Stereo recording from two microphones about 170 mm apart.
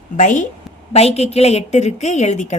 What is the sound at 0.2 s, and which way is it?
A woman's voice, 45° left (ahead or behind).